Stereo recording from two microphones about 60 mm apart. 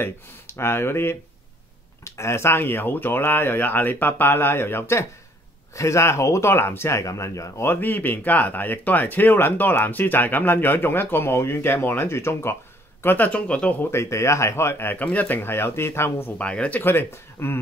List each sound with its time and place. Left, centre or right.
0.0 s speech: left
7.6 s speech: left
13.0 s speech: left
13.8 s speech: left
15.0 s speech: left
16.3 s speech: left
16.8 s speech: left